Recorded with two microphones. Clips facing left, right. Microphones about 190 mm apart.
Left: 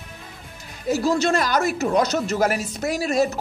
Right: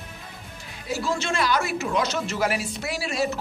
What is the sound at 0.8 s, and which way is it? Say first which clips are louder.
A man's voice: left 7 dB; 40° left (ahead or behind).